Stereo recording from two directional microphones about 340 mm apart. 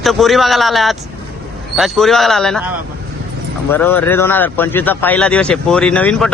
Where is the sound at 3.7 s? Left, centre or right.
Centre.